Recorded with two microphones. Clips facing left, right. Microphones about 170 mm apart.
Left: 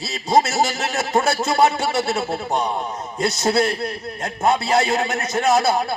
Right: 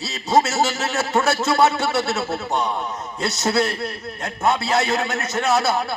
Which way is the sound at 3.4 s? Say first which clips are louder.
Left 1 dB; 35° left (ahead or behind).